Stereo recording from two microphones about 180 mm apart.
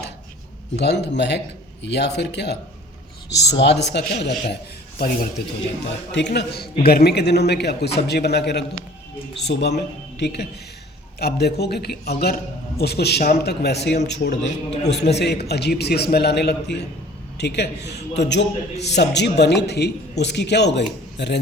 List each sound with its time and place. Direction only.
0.8 s a man's voice: 70° left (ahead or behind)
4.9 s a man's voice: 55° left (ahead or behind)
6.1 s a man's voice: 75° left (ahead or behind)